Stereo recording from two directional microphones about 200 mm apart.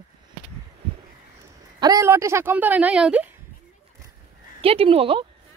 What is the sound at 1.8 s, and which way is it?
Speech, 15° right (ahead or behind).